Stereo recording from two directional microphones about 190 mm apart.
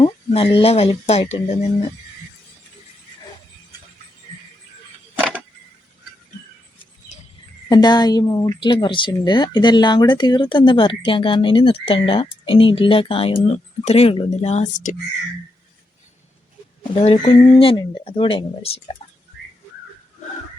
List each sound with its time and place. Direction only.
0.0 s speech: 30° left (ahead or behind)
7.7 s speech: 20° left (ahead or behind); by 14.9 s 40° left (ahead or behind)
16.9 s speech: 35° left (ahead or behind)
19.0 s whistling: 35° left (ahead or behind)